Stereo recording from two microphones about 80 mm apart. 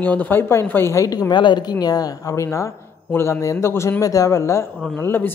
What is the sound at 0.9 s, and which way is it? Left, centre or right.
Speech, left.